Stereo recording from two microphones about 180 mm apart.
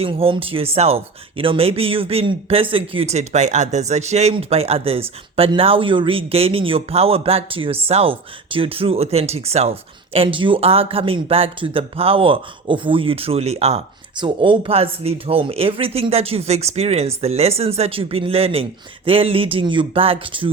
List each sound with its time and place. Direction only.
0.0 s speech: 30° right (ahead or behind)